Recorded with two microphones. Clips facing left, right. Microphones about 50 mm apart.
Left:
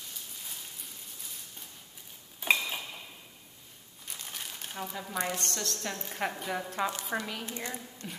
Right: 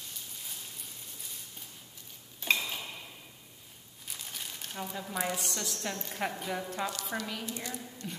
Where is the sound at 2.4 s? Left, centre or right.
Centre.